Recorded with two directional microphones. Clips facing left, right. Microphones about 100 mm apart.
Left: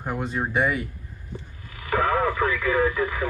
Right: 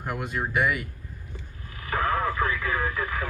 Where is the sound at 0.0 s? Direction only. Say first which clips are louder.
Left 3 dB; 20° left (ahead or behind).